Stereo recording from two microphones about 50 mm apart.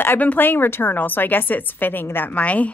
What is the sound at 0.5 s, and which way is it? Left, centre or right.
A woman's voice, left.